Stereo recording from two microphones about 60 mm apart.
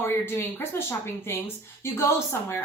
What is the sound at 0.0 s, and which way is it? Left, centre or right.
A woman's voice, left.